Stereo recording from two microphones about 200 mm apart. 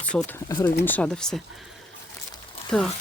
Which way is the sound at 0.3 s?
15° left (ahead or behind).